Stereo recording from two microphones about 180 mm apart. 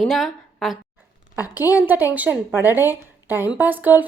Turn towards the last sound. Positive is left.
turn(degrees=-10)  # may be behind; listen again after turning